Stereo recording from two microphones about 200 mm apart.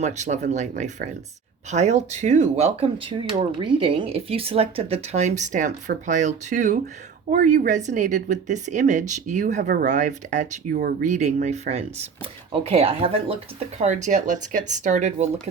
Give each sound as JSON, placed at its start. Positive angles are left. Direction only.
{"t": 0.0, "sound": "speech", "side_deg": -35}